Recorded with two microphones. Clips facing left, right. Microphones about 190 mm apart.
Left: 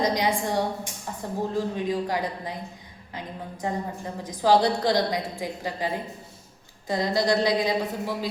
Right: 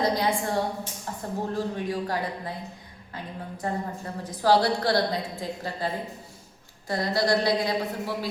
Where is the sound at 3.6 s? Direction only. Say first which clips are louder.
Left 1 dB; 15° left (ahead or behind).